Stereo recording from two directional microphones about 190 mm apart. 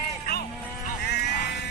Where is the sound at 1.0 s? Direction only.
60° left (ahead or behind).